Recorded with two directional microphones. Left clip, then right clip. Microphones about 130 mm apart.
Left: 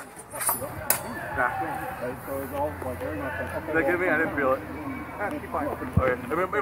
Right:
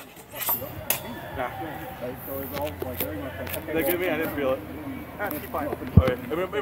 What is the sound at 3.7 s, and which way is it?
Speech, 30° right (ahead or behind).